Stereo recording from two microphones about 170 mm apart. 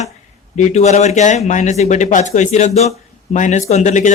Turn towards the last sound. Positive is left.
turn(degrees=45)  # may be behind; listen again after turning